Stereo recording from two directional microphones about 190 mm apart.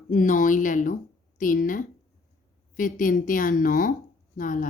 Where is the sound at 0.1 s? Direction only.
45° left (ahead or behind).